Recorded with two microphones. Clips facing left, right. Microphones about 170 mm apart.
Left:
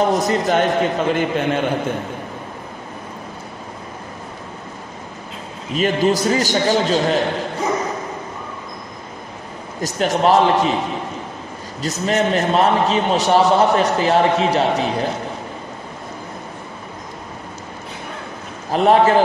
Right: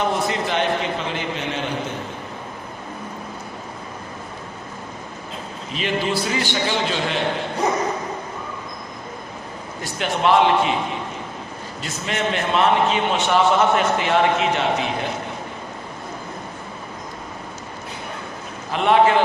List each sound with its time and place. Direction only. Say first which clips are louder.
0.1 s a man's voice: left 5 dB; 45° left (ahead or behind)
5.8 s a man's voice: left 6 dB; 45° left (ahead or behind)
9.8 s a man's voice: left 6 dB; 40° left (ahead or behind)
11.8 s a man's voice: left 7 dB; 40° left (ahead or behind)
18.7 s a man's voice: left 3 dB; 40° left (ahead or behind)